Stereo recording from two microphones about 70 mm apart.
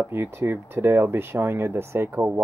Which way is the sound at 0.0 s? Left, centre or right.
Right.